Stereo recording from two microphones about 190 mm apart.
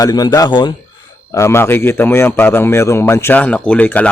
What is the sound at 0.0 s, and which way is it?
A man's voice, 20° left (ahead or behind).